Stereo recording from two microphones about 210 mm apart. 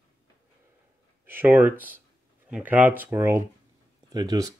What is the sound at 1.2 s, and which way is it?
Speech, 10° right (ahead or behind).